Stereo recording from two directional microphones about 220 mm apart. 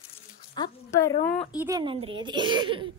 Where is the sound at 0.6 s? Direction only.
15° left (ahead or behind).